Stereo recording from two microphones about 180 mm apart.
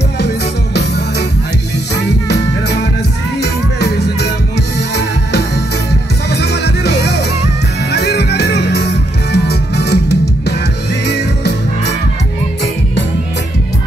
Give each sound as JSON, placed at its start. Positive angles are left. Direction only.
{"t": 2.2, "sound": "music", "side_deg": 70}
{"t": 3.8, "sound": "music", "side_deg": 65}
{"t": 6.3, "sound": "music", "side_deg": 70}